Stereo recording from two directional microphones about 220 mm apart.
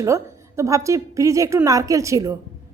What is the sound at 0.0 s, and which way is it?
A woman's voice, 15° right (ahead or behind).